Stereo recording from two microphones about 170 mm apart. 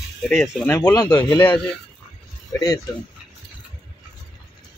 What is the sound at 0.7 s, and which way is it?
Speech, 15° left (ahead or behind).